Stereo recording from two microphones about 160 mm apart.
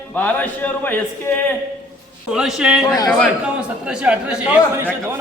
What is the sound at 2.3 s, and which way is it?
Speech, 5° right (ahead or behind).